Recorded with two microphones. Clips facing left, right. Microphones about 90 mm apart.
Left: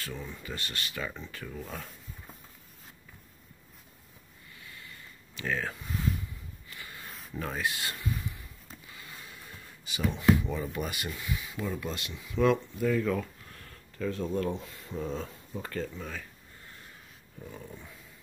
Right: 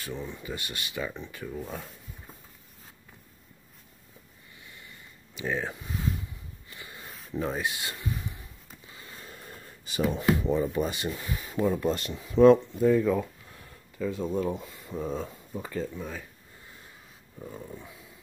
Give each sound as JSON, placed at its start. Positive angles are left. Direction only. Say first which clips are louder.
{"t": 0.0, "sound": "speech", "louder": "right 3 dB", "side_deg": -20}
{"t": 5.3, "sound": "speech", "louder": "right 2 dB", "side_deg": -15}
{"t": 6.7, "sound": "a sound", "louder": "even", "side_deg": -20}
{"t": 10.3, "sound": "speech", "louder": "right 5 dB", "side_deg": -35}
{"t": 17.5, "sound": "speech", "louder": "right 3 dB", "side_deg": -15}